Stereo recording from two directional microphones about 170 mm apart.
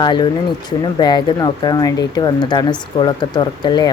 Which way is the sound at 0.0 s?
25° left (ahead or behind).